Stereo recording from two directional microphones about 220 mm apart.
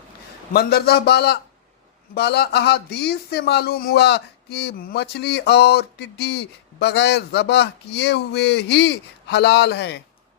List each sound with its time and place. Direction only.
0.5 s a man's voice: 45° left (ahead or behind)